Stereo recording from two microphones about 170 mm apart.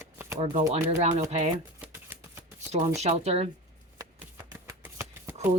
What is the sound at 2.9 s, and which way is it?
Speech, 40° right (ahead or behind).